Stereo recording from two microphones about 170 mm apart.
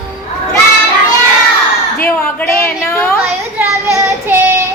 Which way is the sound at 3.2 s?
10° right (ahead or behind).